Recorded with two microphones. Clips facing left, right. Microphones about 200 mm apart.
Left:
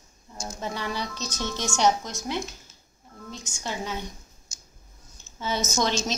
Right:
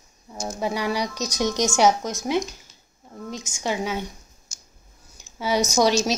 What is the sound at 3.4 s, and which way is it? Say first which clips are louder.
Speech: right 6 dB; 15° right (ahead or behind).